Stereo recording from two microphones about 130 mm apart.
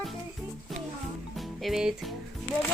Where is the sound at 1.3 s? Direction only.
Centre (ahead or behind).